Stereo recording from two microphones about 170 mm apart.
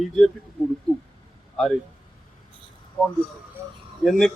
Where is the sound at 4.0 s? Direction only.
Centre (ahead or behind).